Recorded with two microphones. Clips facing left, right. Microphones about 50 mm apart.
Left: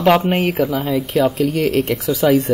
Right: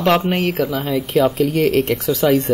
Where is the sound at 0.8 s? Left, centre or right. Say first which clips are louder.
Even; centre.